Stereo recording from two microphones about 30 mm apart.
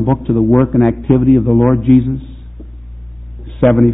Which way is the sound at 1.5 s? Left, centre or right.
Left.